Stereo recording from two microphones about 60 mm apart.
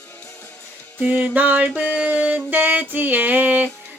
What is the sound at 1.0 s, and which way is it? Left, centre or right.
Music, right.